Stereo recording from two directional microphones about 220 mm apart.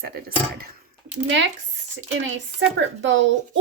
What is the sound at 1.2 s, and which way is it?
Speech, 55° right (ahead or behind).